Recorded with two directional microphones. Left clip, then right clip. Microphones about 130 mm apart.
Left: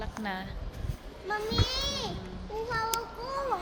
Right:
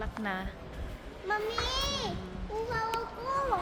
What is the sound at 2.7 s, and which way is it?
Child singing, 30° left (ahead or behind).